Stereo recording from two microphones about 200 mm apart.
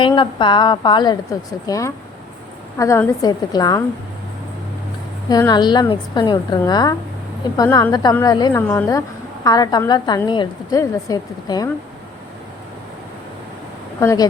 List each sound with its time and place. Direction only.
0.0 s a woman's voice: 25° left (ahead or behind)
5.3 s a woman's voice: 20° left (ahead or behind)
14.0 s a woman's voice: 15° left (ahead or behind)